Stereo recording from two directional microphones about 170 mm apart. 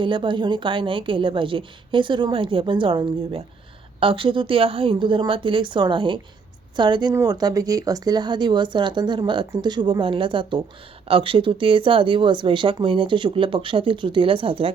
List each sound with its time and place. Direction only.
0.0 s speech: 30° right (ahead or behind)